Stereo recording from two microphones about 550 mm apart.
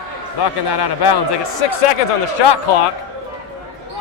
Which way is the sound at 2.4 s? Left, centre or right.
Left.